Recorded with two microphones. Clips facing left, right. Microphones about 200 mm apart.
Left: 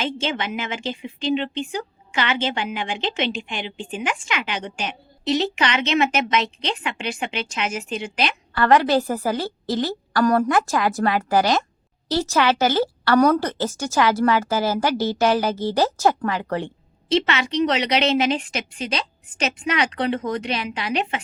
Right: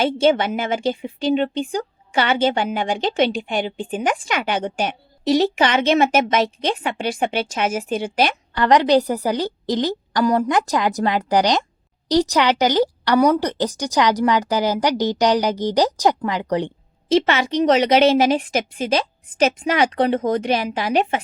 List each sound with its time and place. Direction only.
0.0 s a woman's voice: 45° right (ahead or behind)
8.5 s a woman's voice: 20° right (ahead or behind)
17.1 s a woman's voice: 45° right (ahead or behind)